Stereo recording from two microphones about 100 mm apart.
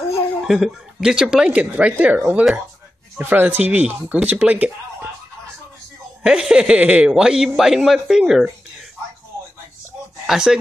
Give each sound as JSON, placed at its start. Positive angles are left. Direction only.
{"t": 0.4, "sound": "a man's voice", "side_deg": -5}
{"t": 6.2, "sound": "a man's voice", "side_deg": -5}
{"t": 10.2, "sound": "a man's voice", "side_deg": -5}